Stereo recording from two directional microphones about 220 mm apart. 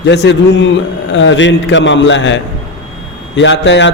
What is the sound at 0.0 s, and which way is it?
A man's voice, 50° left (ahead or behind).